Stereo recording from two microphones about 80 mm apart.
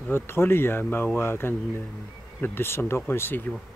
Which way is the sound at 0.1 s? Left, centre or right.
Left.